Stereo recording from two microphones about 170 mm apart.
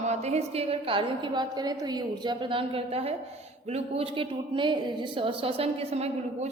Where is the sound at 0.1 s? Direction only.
40° right (ahead or behind).